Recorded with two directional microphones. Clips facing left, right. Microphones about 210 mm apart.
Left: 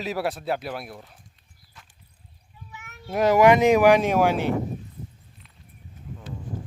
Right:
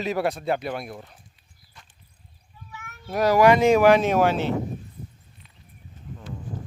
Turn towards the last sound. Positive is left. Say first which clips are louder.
# even
turn(degrees=0)  # may be behind; listen again after turning